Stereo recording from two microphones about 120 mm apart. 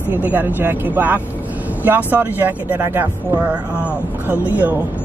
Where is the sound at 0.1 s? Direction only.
15° right (ahead or behind).